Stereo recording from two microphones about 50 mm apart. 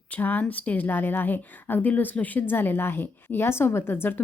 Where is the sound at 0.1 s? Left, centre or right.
Left.